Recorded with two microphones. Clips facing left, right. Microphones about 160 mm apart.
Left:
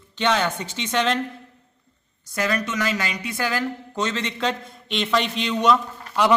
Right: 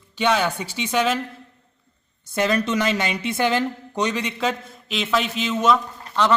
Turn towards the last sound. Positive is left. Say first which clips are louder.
# left 1 dB
turn(degrees=10)  # may be behind; listen again after turning